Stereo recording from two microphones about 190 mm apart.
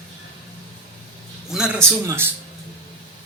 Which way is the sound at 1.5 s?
5° right (ahead or behind).